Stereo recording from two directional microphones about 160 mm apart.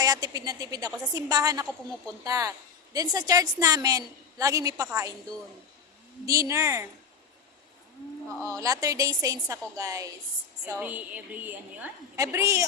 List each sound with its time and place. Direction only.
0.0 s a woman's voice: 25° right (ahead or behind)
8.4 s a woman's voice: 20° right (ahead or behind)
10.8 s a woman's voice: 10° right (ahead or behind)